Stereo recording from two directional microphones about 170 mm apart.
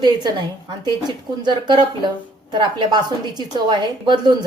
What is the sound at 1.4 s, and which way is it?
A woman's voice, 25° right (ahead or behind).